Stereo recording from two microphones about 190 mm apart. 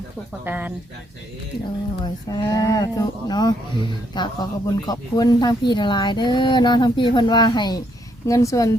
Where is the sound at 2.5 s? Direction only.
20° left (ahead or behind).